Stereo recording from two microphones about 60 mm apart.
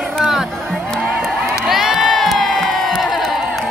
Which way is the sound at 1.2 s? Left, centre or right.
Centre.